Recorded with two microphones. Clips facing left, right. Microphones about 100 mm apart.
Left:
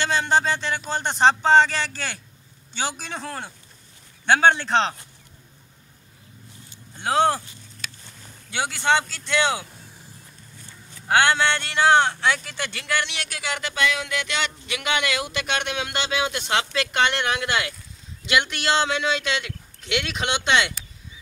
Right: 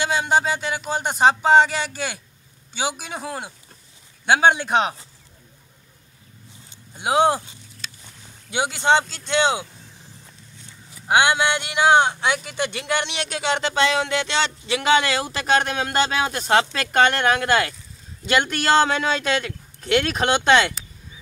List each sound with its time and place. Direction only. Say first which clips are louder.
0.0 s speech: right 1 dB; 10° right (ahead or behind)
6.7 s a sound: right 2 dB; 15° right (ahead or behind)
8.5 s speech: right 3 dB; 20° right (ahead or behind)
11.0 s speech: right 1 dB; 15° right (ahead or behind); by 20.7 s 45° right (ahead or behind)